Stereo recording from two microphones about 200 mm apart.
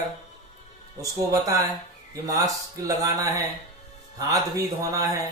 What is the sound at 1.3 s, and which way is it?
Speech, 15° right (ahead or behind).